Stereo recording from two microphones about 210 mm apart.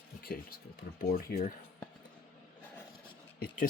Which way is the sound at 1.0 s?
45° left (ahead or behind).